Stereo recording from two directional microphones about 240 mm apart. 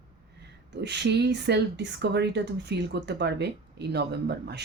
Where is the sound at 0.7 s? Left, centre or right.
Right.